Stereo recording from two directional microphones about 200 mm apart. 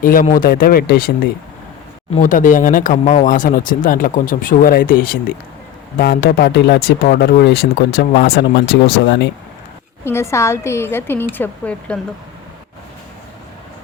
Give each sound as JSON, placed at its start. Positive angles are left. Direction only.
{"t": 0.0, "sound": "speech", "side_deg": 45}
{"t": 6.0, "sound": "speech", "side_deg": 60}
{"t": 10.0, "sound": "a woman's voice", "side_deg": 10}